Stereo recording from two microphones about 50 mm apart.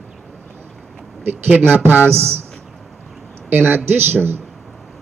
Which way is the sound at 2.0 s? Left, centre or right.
Right.